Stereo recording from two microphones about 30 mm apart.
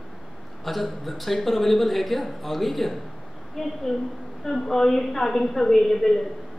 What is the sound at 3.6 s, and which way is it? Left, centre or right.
Speech, centre.